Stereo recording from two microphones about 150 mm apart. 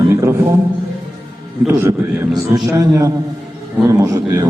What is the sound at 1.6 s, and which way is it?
A man's voice, 15° right (ahead or behind).